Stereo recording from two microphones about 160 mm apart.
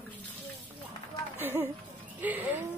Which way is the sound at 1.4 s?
15° right (ahead or behind).